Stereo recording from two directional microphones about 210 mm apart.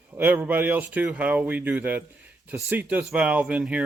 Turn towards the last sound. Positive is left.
turn(degrees=-5)  # may be behind; listen again after turning